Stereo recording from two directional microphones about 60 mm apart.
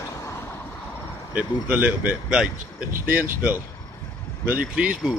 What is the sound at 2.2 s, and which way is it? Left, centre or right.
Speech, centre.